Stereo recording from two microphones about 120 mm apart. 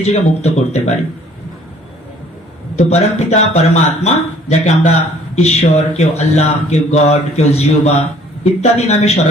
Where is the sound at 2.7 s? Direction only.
70° left (ahead or behind).